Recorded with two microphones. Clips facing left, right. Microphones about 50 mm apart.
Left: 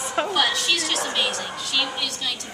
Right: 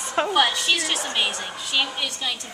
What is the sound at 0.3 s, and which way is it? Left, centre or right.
A woman's voice, centre.